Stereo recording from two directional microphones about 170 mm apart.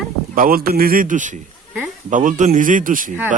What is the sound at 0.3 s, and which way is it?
A man's voice, 60° right (ahead or behind).